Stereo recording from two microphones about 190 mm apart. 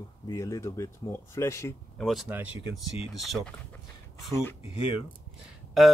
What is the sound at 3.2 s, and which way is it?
Speech, centre (ahead or behind).